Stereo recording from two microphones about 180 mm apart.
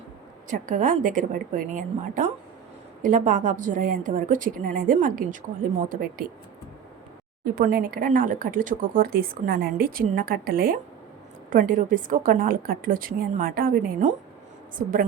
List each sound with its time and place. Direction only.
0.5 s speech: 45° right (ahead or behind)
7.4 s speech: 55° right (ahead or behind)